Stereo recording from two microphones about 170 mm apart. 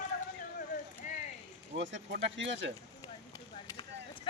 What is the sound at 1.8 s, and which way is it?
Speech, 90° right.